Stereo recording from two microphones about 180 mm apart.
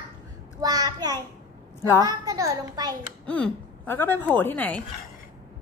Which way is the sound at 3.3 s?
5° left (ahead or behind).